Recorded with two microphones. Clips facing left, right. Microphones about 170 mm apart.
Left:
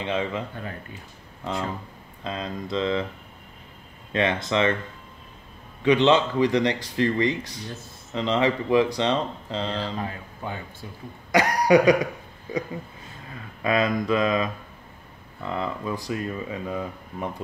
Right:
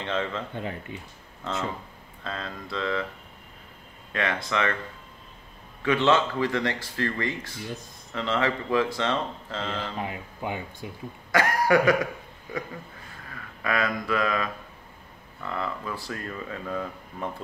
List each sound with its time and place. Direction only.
0.0 s speech: 15° left (ahead or behind)
0.6 s speech: 20° right (ahead or behind)
2.2 s speech: 20° left (ahead or behind)
4.1 s speech: 20° left (ahead or behind)
5.8 s speech: 20° left (ahead or behind)
9.9 s speech: 15° right (ahead or behind)
11.3 s speech: 20° left (ahead or behind)